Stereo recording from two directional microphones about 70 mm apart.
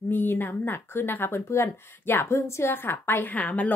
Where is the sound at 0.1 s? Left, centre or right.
Left.